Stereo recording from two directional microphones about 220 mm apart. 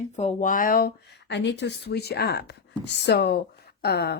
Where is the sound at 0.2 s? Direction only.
35° left (ahead or behind).